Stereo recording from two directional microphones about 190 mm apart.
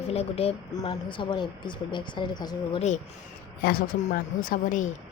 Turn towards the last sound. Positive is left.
turn(degrees=45)  # may be behind; listen again after turning